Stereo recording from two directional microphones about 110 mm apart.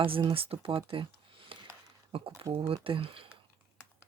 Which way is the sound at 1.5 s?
55° right (ahead or behind).